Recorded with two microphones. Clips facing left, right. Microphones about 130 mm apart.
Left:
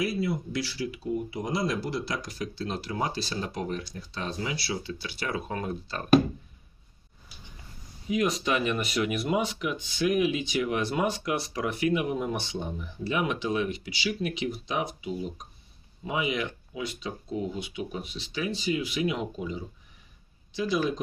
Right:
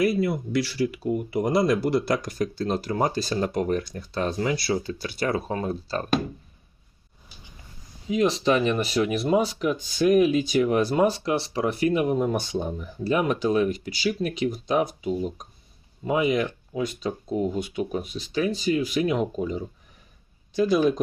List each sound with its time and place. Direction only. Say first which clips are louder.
0.0 s speech: right 6 dB; 60° right (ahead or behind); by 6.1 s 35° right (ahead or behind)
8.0 s speech: right 5 dB; 30° right (ahead or behind); by 20.8 s 45° right (ahead or behind)